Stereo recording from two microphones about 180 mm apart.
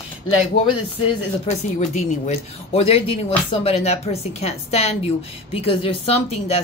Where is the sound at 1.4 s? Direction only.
35° left (ahead or behind).